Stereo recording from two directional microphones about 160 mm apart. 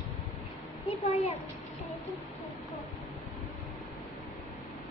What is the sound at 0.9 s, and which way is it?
Speech, 40° left (ahead or behind).